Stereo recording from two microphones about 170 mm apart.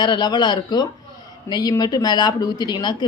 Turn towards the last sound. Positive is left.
turn(degrees=25)  # may be behind; listen again after turning